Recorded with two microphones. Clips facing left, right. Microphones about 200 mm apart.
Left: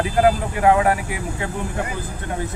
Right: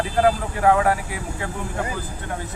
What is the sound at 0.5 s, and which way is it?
Speech, 20° left (ahead or behind).